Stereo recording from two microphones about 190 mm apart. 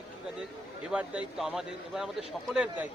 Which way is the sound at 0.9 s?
5° right (ahead or behind).